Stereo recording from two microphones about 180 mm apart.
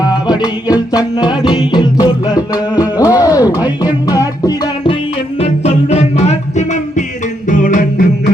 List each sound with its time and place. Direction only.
0.0 s music: 20° left (ahead or behind)
5.4 s music: 35° left (ahead or behind)